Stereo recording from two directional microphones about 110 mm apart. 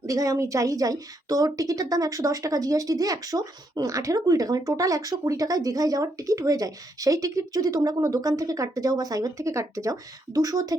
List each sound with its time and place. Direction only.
0.0 s a woman's voice: 30° right (ahead or behind)